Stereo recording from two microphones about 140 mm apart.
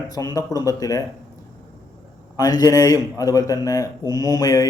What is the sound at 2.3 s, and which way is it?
A man's voice, 25° left (ahead or behind).